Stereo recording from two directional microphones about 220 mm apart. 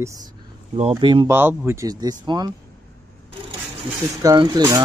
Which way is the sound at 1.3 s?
10° right (ahead or behind).